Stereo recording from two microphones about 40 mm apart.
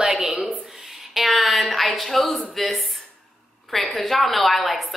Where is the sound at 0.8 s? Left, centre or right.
Centre.